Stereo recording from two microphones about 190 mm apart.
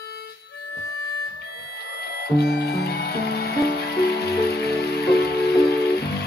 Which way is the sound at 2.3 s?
55° left (ahead or behind).